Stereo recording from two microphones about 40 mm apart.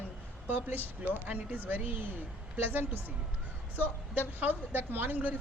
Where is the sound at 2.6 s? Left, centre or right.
Right.